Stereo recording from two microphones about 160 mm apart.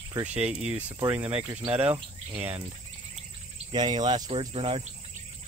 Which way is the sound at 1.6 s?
35° right (ahead or behind).